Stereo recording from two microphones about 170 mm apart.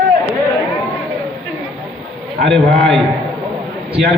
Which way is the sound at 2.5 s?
5° left (ahead or behind).